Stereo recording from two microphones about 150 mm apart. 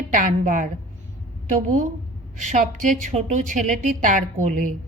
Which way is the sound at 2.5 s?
55° right (ahead or behind).